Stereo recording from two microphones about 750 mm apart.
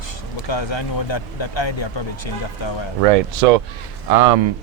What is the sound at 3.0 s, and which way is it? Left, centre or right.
Speech, right.